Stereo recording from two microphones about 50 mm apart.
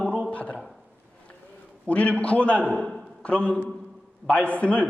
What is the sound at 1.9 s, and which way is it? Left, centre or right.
A man's voice, left.